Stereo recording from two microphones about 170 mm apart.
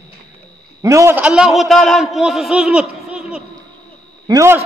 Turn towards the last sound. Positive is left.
turn(degrees=-15)  # may be behind; listen again after turning